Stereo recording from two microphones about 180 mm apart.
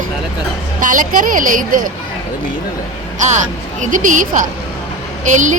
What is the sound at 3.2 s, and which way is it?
A woman's voice, 40° right (ahead or behind).